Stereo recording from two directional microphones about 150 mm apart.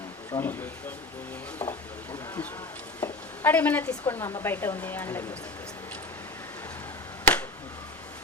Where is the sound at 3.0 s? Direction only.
10° left (ahead or behind).